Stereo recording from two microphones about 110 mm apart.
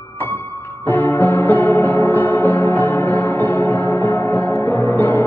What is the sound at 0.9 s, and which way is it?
Music, 15° left (ahead or behind).